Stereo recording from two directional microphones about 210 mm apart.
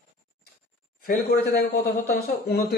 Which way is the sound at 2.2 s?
50° left (ahead or behind).